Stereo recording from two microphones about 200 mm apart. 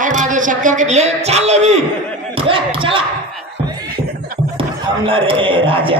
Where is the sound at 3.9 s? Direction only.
50° right (ahead or behind).